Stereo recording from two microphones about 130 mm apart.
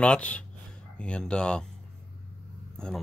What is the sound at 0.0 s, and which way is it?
Speech, 10° left (ahead or behind).